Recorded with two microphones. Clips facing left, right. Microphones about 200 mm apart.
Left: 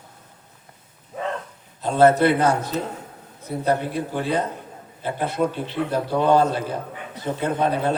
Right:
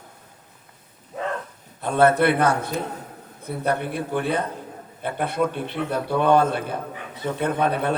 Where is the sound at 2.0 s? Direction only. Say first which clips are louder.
Left 2 dB; 60° right (ahead or behind).